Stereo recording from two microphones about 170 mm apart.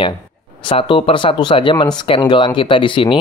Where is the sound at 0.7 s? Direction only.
30° left (ahead or behind).